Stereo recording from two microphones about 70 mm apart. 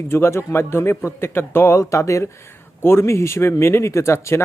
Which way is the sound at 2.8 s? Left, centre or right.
Left.